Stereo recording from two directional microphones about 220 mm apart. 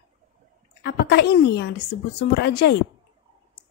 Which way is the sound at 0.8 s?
50° left (ahead or behind).